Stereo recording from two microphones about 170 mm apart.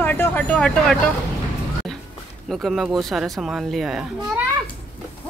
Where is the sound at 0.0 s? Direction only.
10° left (ahead or behind).